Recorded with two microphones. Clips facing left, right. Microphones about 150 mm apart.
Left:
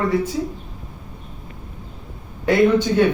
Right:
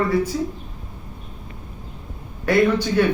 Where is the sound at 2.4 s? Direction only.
20° left (ahead or behind).